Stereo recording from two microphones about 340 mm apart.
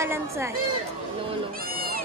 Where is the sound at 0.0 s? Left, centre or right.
Centre.